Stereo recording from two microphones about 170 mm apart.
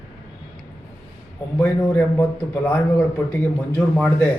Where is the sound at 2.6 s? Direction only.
10° left (ahead or behind).